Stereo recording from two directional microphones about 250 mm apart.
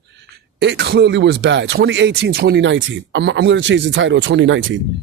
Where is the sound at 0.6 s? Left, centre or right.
Right.